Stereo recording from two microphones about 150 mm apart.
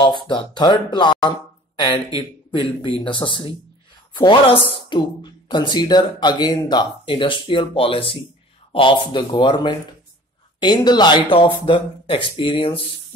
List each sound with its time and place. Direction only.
0.3 s speech: 30° left (ahead or behind)